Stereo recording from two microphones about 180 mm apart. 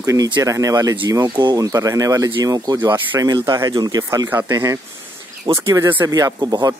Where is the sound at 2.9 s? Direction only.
10° right (ahead or behind).